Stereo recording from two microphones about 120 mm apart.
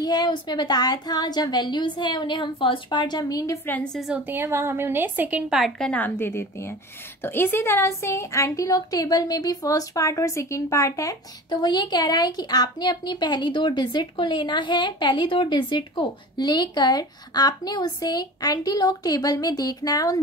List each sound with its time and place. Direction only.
0.0 s a woman's voice: 35° left (ahead or behind)
3.6 s a woman's voice: 15° left (ahead or behind)
4.1 s a woman's voice: 15° right (ahead or behind)
5.5 s a woman's voice: centre (ahead or behind)
5.9 s a woman's voice: 15° left (ahead or behind); by 20.2 s 30° left (ahead or behind)